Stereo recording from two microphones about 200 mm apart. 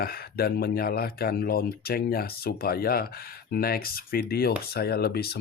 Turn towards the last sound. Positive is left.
turn(degrees=50)  # may be behind; listen again after turning